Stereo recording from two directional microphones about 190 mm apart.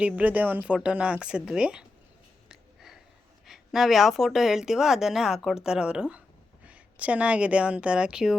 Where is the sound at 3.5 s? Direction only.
Centre (ahead or behind).